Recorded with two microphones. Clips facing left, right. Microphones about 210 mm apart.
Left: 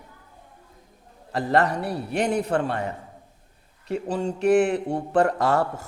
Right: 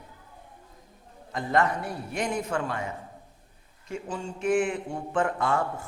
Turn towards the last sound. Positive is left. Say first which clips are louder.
# left 5 dB
turn(degrees=40)  # may be behind; listen again after turning